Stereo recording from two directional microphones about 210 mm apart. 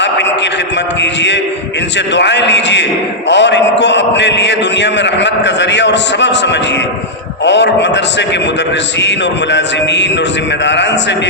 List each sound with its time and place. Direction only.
2.1 s a man's voice: 55° left (ahead or behind)
9.0 s a man's voice: 55° left (ahead or behind)